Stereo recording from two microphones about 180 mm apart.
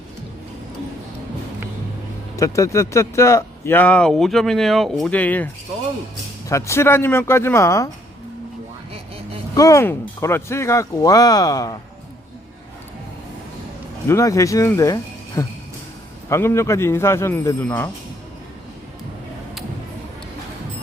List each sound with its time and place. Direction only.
2.3 s speech: 15° left (ahead or behind)
6.5 s speech: 15° left (ahead or behind)
9.6 s speech: 15° left (ahead or behind)
14.1 s speech: 15° left (ahead or behind)